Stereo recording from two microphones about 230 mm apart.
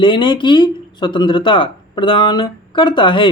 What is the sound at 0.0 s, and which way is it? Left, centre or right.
Speech, left.